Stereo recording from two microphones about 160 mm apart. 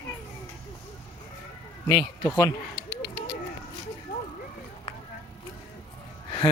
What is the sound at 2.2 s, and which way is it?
Speech, 15° left (ahead or behind).